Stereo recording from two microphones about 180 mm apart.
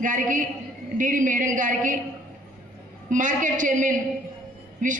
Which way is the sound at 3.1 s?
45° right (ahead or behind).